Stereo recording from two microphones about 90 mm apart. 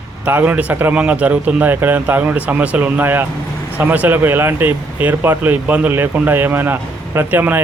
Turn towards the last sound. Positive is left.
turn(degrees=-20)  # may be behind; listen again after turning